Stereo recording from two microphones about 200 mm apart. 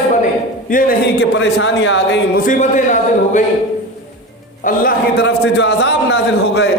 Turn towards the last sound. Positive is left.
turn(degrees=60)  # may be behind; listen again after turning